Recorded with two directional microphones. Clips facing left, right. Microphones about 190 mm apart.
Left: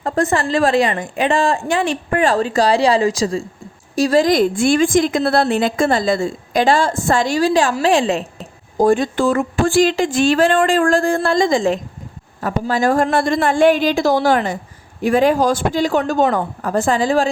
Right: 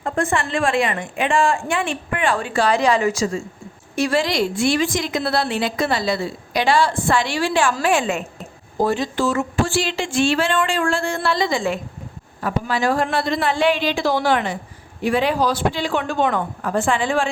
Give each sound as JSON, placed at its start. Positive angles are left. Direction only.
{"t": 0.0, "sound": "a woman's voice", "side_deg": 35}
{"t": 8.8, "sound": "a woman's voice", "side_deg": 50}
{"t": 11.1, "sound": "a woman's voice", "side_deg": 50}